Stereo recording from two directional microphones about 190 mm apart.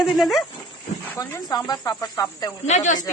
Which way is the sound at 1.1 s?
15° left (ahead or behind).